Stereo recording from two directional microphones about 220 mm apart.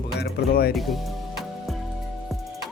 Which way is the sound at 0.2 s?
45° left (ahead or behind).